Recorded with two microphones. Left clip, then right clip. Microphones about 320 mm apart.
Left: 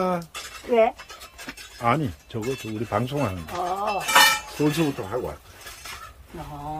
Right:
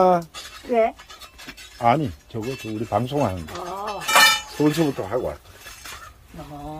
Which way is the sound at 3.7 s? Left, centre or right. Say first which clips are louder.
Left 3 dB; left.